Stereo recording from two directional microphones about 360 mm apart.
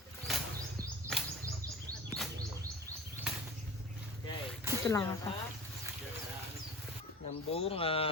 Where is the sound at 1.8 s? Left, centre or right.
Centre.